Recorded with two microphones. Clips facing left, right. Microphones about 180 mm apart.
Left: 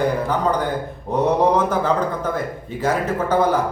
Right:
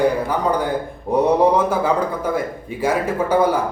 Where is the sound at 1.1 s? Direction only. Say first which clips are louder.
Right 3 dB; 10° right (ahead or behind).